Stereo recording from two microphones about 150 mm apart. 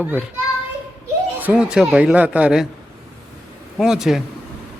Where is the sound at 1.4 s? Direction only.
10° right (ahead or behind).